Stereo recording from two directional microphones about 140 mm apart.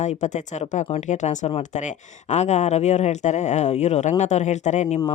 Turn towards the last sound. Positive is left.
turn(degrees=55)  # may be behind; listen again after turning